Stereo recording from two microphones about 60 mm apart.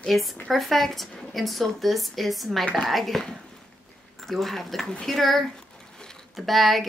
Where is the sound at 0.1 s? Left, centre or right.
Centre.